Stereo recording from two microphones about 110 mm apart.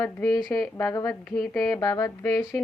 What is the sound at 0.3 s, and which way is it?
Speech, 40° left (ahead or behind).